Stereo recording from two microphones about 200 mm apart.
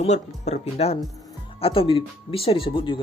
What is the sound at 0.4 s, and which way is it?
Speech, 35° left (ahead or behind).